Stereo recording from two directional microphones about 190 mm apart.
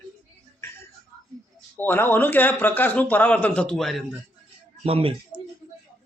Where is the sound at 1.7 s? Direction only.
10° left (ahead or behind).